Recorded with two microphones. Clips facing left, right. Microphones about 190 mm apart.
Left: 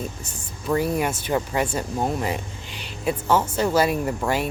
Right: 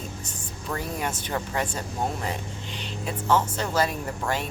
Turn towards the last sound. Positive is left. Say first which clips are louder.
# left 5 dB
turn(degrees=10)  # may be behind; listen again after turning